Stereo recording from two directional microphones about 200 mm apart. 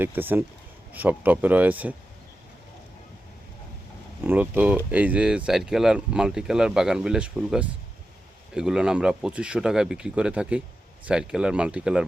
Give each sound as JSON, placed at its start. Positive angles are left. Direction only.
{"t": 0.0, "sound": "speech", "side_deg": -10}
{"t": 4.2, "sound": "speech", "side_deg": -10}